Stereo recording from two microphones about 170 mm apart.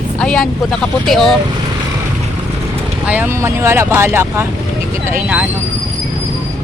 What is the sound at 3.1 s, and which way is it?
Speech, 10° right (ahead or behind).